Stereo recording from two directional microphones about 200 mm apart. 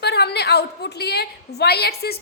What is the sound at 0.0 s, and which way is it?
A woman's voice, 55° left (ahead or behind).